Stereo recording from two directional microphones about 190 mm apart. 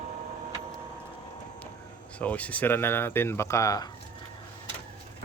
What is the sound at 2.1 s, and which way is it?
Speech, 5° left (ahead or behind).